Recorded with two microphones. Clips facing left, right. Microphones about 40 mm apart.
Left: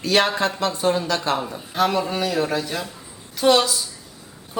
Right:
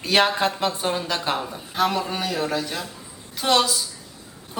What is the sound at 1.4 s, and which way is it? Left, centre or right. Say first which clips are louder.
A woman's voice: left 2 dB; centre.